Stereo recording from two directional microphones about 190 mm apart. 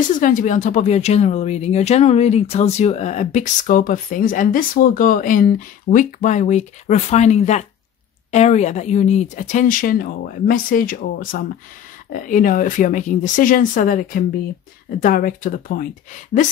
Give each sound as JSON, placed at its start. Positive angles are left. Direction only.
{"t": 0.1, "sound": "speech", "side_deg": 45}